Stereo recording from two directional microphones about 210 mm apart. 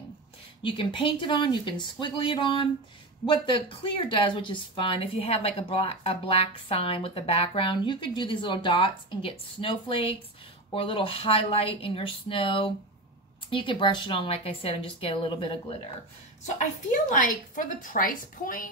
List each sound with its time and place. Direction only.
0.6 s speech: 25° left (ahead or behind)
16.5 s a woman's voice: 40° left (ahead or behind)